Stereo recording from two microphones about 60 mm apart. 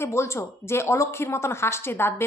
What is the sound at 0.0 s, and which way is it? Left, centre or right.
A woman's voice, left.